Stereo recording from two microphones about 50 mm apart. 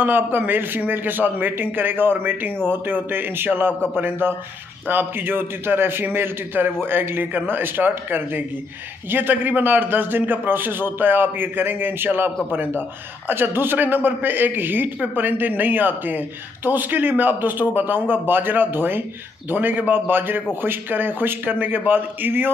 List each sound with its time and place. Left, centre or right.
0.0 s a man's voice: right
13.3 s a man's voice: right